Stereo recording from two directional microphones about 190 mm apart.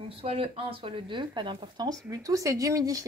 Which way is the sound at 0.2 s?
30° right (ahead or behind).